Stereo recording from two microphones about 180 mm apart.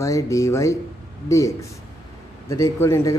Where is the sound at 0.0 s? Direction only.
15° left (ahead or behind).